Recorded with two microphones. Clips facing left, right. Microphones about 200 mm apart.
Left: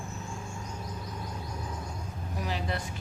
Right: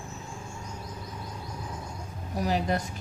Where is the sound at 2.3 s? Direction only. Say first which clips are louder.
Right 7 dB; 40° right (ahead or behind).